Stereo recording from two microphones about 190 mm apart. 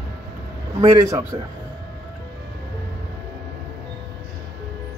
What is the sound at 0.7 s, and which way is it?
Speech, 20° right (ahead or behind).